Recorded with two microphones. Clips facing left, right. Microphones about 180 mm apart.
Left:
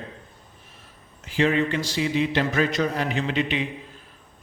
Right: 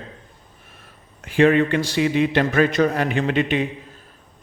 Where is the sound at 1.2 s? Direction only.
60° right (ahead or behind).